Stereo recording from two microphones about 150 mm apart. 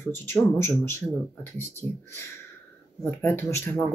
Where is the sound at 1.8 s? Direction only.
35° right (ahead or behind).